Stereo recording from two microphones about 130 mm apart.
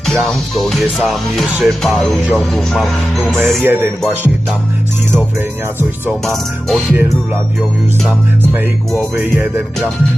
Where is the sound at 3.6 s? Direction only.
15° right (ahead or behind).